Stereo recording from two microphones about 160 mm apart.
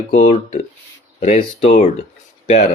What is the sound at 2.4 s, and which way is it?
Speech, 45° left (ahead or behind).